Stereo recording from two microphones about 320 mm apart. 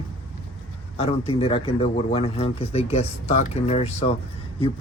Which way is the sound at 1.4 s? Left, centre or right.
Centre.